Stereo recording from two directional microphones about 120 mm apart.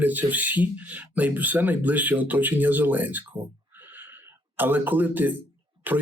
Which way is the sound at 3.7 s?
15° right (ahead or behind).